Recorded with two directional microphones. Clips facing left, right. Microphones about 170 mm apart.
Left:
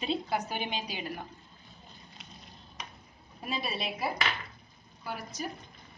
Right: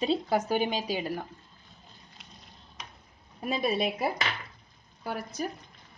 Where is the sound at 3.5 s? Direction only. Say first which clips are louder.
Right 7 dB; 50° right (ahead or behind).